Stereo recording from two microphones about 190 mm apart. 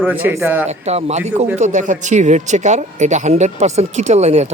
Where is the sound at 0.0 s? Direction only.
10° right (ahead or behind).